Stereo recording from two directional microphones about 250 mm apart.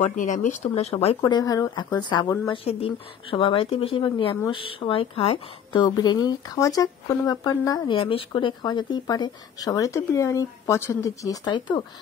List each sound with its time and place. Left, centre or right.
0.0 s speech: left